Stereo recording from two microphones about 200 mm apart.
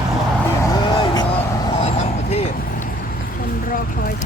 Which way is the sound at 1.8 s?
30° left (ahead or behind).